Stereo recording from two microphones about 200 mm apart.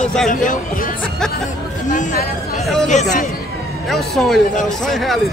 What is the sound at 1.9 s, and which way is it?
Speech, 40° left (ahead or behind).